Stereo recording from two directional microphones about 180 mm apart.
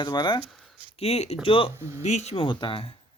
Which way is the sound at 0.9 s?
35° left (ahead or behind).